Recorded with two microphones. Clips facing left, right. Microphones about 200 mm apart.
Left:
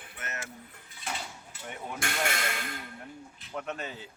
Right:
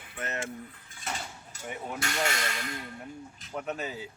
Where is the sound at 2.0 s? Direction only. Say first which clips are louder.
Even; 50° left (ahead or behind).